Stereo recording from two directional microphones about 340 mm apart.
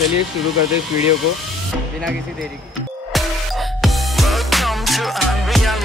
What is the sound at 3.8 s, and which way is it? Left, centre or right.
Music, centre.